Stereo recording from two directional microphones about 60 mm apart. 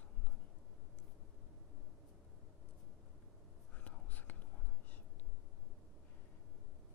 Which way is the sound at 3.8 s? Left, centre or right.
Left.